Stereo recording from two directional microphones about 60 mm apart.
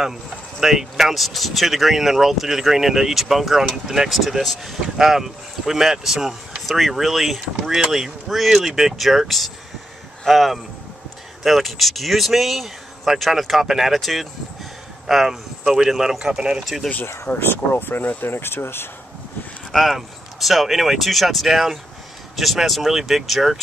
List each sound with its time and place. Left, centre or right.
0.6 s speech: centre
17.0 s speech: left
19.7 s speech: centre